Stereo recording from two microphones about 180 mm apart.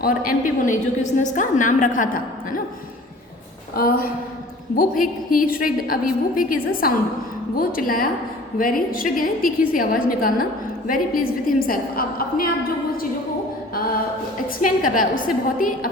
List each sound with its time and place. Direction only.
0.0 s a woman's voice: 50° left (ahead or behind)
3.8 s a woman's voice: 55° left (ahead or behind)
14.6 s a woman's voice: 50° left (ahead or behind)